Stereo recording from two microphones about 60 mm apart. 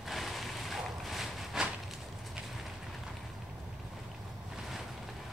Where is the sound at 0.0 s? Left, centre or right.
Centre.